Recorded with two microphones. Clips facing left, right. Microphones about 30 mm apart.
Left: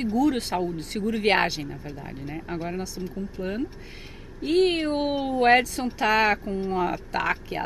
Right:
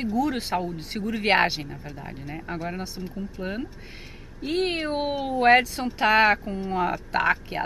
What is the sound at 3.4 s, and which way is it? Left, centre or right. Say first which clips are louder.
A woman's voice: left 3 dB; centre.